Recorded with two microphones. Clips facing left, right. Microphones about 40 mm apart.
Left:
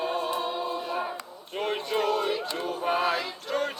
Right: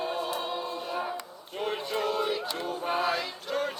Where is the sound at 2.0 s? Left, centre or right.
Left.